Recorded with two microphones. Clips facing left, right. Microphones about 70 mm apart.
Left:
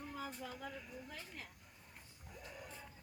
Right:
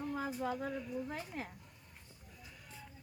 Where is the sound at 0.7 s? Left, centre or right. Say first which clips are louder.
Right 10 dB; centre.